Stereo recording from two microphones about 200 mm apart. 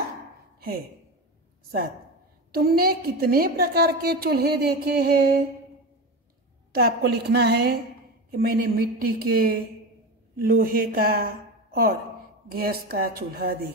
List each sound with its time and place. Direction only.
0.6 s speech: 50° right (ahead or behind)
2.5 s a woman's voice: 50° right (ahead or behind)
6.7 s a woman's voice: 50° right (ahead or behind)